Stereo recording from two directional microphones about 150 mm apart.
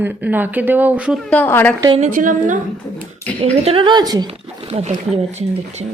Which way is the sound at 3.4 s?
40° right (ahead or behind).